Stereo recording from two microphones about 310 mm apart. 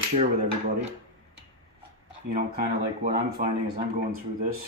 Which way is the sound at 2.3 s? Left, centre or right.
Right.